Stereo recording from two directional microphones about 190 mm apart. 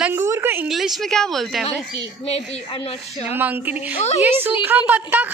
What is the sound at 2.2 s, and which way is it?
Speech, 30° left (ahead or behind).